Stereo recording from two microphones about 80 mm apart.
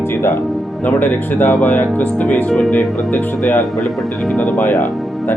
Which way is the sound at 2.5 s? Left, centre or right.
Centre.